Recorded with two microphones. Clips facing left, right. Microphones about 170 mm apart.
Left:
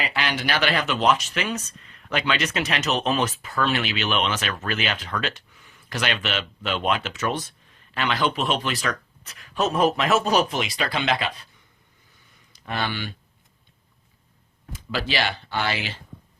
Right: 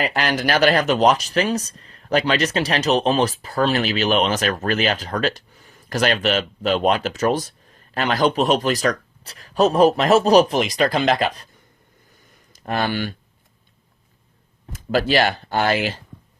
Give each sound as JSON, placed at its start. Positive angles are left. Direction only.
{"t": 0.0, "sound": "speech", "side_deg": -45}
{"t": 12.5, "sound": "speech", "side_deg": -45}
{"t": 14.7, "sound": "speech", "side_deg": -45}